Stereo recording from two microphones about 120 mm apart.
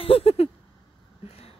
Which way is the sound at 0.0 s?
50° left (ahead or behind).